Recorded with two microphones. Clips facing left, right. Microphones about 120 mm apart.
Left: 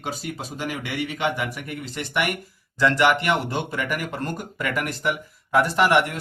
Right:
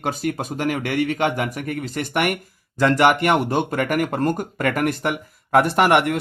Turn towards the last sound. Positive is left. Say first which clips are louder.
# right 3 dB
turn(degrees=-55)  # may be behind; listen again after turning